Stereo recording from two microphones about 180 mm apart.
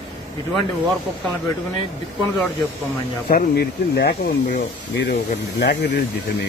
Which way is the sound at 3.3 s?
65° left (ahead or behind).